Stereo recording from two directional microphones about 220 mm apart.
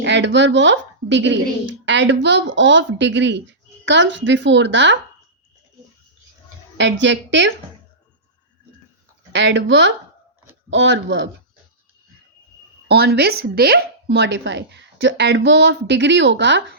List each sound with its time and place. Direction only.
0.0 s a woman's voice: 55° right (ahead or behind)
6.7 s a woman's voice: 55° right (ahead or behind)
9.3 s a woman's voice: 55° right (ahead or behind)
12.9 s speech: 45° right (ahead or behind)